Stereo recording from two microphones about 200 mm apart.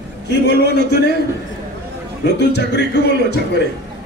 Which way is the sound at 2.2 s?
55° left (ahead or behind).